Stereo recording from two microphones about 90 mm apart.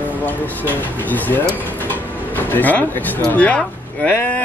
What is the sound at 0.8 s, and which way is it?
Speech, 20° left (ahead or behind).